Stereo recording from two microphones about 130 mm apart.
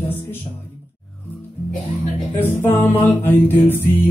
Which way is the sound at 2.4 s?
15° left (ahead or behind).